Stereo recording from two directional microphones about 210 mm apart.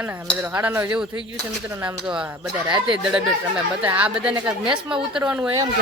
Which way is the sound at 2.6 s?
25° right (ahead or behind).